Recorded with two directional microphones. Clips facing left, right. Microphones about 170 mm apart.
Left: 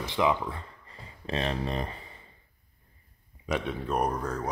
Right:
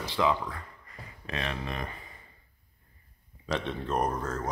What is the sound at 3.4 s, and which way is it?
Speech, 10° left (ahead or behind).